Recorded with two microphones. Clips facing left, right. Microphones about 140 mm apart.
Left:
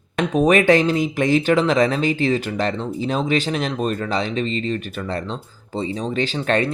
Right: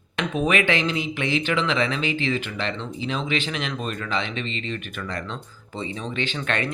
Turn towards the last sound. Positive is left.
turn(degrees=35)  # may be behind; listen again after turning